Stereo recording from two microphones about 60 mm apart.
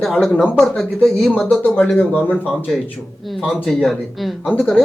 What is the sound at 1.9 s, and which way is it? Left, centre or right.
Speech, left.